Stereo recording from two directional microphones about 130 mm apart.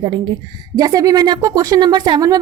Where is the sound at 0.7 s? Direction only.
25° right (ahead or behind).